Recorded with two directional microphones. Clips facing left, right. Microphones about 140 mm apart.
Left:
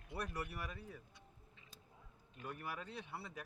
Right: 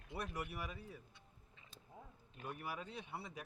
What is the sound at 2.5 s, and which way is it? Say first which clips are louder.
Speech: even; 10° right (ahead or behind).